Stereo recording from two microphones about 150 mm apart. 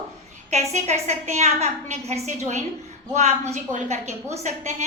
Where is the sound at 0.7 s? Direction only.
50° right (ahead or behind).